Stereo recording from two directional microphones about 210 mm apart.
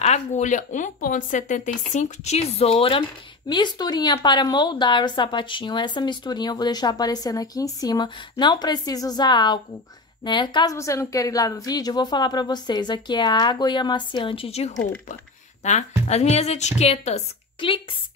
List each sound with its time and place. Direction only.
0.0 s a woman's voice: 35° left (ahead or behind)